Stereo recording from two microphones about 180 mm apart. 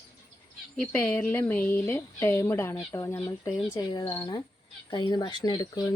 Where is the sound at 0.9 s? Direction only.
10° left (ahead or behind).